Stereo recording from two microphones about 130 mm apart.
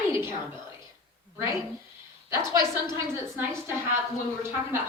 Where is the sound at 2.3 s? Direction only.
20° right (ahead or behind).